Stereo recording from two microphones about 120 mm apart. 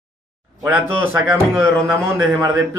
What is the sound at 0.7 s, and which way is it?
Speech, 15° right (ahead or behind).